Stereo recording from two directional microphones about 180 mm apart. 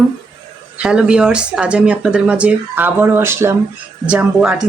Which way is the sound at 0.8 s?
5° right (ahead or behind).